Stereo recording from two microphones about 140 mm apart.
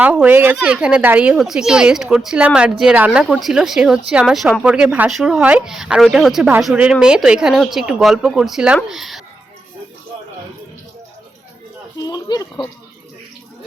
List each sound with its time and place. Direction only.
0.0 s speech: 10° right (ahead or behind)
11.9 s speech: 30° left (ahead or behind)